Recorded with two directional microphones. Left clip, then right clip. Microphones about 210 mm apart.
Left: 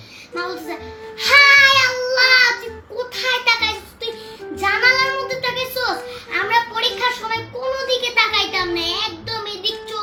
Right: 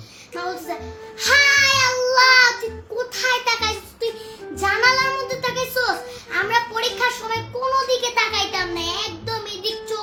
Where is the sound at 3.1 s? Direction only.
25° right (ahead or behind).